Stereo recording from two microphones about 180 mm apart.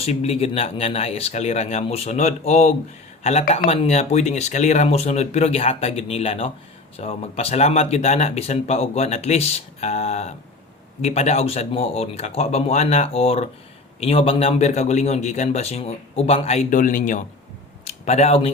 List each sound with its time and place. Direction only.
0.0 s speech: 35° left (ahead or behind)
17.8 s speech: 35° left (ahead or behind)